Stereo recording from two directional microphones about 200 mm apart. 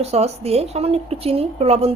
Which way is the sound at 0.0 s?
30° right (ahead or behind).